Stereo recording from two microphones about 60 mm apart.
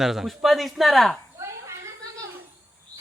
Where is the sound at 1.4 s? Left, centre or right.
Right.